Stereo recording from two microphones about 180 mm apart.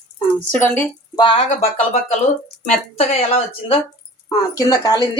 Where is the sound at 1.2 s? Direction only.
25° left (ahead or behind).